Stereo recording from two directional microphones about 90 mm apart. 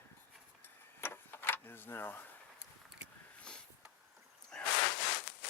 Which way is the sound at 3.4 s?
10° left (ahead or behind).